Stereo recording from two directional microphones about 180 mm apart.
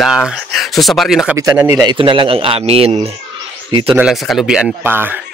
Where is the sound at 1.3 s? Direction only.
15° right (ahead or behind); by 3.1 s 35° right (ahead or behind).